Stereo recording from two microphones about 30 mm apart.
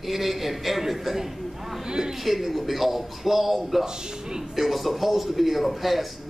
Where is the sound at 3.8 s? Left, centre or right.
Right.